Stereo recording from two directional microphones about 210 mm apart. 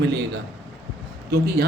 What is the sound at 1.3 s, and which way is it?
Speech, 50° right (ahead or behind).